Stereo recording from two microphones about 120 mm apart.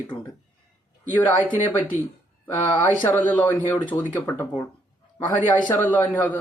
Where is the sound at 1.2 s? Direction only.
15° left (ahead or behind).